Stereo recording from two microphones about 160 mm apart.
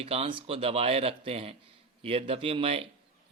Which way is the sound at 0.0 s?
40° right (ahead or behind).